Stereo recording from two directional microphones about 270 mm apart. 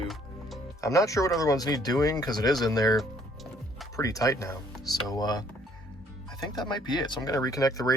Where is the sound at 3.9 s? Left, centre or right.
Centre.